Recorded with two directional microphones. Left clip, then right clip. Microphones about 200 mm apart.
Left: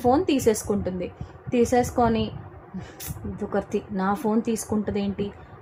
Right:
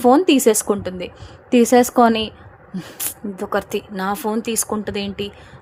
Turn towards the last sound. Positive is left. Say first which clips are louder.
# right 3 dB
turn(degrees=-45)  # may be behind; listen again after turning